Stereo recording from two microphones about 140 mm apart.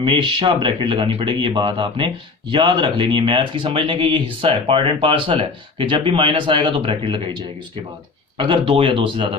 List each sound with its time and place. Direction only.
0.0 s speech: 35° right (ahead or behind)